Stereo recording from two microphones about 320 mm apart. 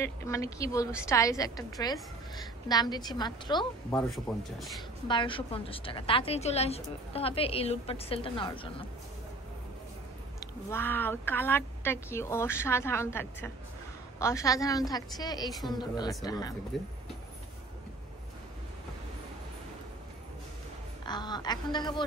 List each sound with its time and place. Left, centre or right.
0.0 s a woman's voice: centre
4.1 s speech: centre
5.0 s a woman's voice: centre
10.4 s a woman's voice: centre
21.0 s a woman's voice: centre